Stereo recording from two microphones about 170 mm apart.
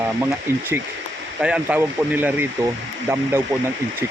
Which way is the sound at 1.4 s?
5° right (ahead or behind).